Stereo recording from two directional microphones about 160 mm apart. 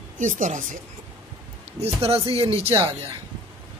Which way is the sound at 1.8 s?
35° right (ahead or behind).